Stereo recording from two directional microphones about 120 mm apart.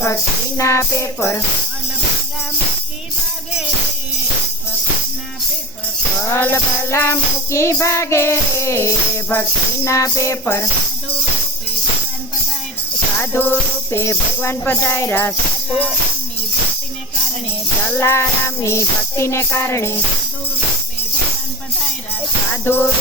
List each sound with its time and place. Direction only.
0.0 s music: 25° left (ahead or behind)
6.3 s music: 20° left (ahead or behind)
13.3 s music: 20° left (ahead or behind)
17.8 s music: 20° left (ahead or behind)
22.6 s music: 20° left (ahead or behind)